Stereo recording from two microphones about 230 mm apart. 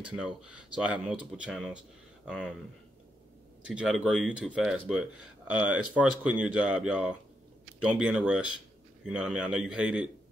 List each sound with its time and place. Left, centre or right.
0.1 s speech: centre
3.6 s speech: centre